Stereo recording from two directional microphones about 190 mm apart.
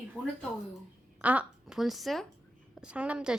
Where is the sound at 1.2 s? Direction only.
5° right (ahead or behind).